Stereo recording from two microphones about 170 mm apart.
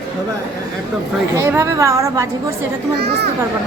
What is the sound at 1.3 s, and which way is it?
Speech, 15° right (ahead or behind).